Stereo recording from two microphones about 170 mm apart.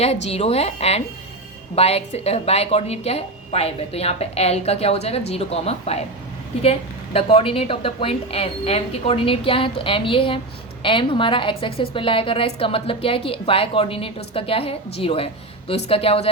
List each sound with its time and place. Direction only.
0.0 s a woman's voice: 35° left (ahead or behind)